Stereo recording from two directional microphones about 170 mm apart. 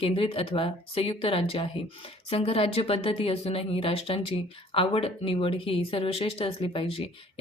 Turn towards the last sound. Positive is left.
turn(degrees=30)  # may be behind; listen again after turning